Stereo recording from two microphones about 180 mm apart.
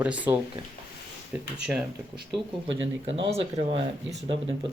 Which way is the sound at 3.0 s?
35° right (ahead or behind).